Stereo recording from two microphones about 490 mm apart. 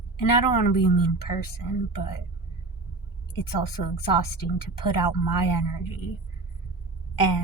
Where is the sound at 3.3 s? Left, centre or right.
Left.